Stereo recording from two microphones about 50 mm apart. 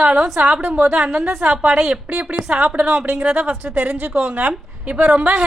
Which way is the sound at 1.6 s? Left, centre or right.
Centre.